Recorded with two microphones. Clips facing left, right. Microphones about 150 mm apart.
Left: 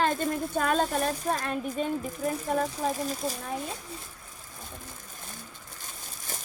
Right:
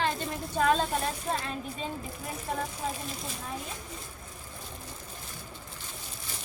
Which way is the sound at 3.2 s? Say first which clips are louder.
Left 8 dB; 40° left (ahead or behind).